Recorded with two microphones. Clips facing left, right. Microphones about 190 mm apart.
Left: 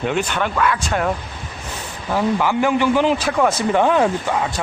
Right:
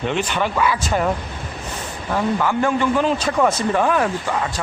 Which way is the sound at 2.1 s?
10° left (ahead or behind).